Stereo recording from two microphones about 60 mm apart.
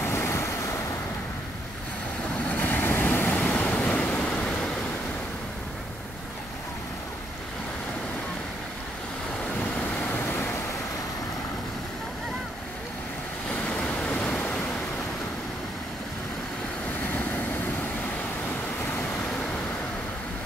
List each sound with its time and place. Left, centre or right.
0.0 s waves: left
2.3 s vehicle: left
2.6 s vehicle: left
3.3 s vehicle: left
13.5 s vehicle: centre